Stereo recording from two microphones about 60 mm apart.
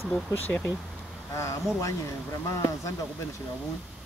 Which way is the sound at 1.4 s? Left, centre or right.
Left.